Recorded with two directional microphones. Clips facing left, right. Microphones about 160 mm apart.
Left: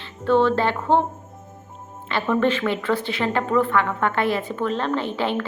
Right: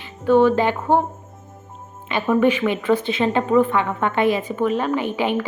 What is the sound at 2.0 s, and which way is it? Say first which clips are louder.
Speech: right 3 dB; 15° right (ahead or behind).